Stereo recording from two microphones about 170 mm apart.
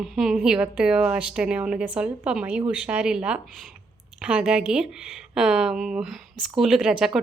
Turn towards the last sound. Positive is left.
turn(degrees=0)  # may be behind; listen again after turning